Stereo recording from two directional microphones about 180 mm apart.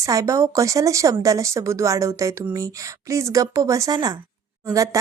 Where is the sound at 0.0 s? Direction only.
20° right (ahead or behind).